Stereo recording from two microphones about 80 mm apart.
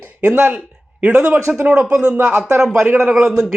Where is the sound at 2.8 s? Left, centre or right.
Right.